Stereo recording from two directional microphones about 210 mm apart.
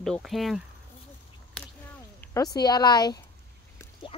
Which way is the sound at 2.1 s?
15° left (ahead or behind).